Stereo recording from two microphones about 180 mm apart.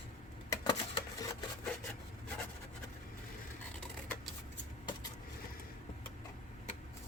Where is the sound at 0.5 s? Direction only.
20° left (ahead or behind).